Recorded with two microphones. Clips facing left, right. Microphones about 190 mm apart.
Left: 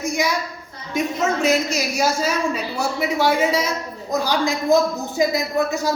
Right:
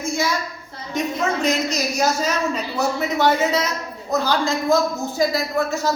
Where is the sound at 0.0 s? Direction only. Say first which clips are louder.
Left 1 dB; 15° left (ahead or behind).